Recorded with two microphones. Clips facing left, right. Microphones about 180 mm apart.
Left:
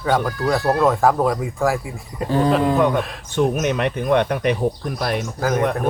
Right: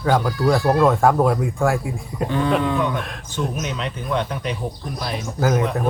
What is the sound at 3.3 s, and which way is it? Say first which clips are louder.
Speech: left 7 dB; 60° left (ahead or behind).